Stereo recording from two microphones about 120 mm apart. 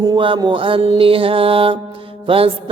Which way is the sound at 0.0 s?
40° right (ahead or behind).